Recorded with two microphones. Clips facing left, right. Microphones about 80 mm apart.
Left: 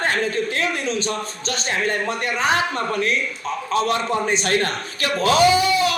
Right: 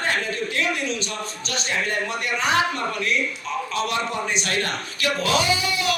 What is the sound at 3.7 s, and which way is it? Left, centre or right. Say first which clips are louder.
Speech: left 6 dB; left.